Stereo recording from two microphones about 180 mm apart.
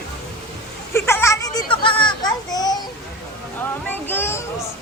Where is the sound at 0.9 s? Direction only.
15° left (ahead or behind).